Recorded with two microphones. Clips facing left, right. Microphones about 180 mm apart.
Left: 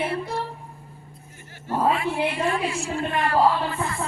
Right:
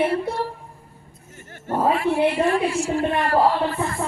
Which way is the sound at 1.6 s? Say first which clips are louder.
Right 2 dB; 45° right (ahead or behind).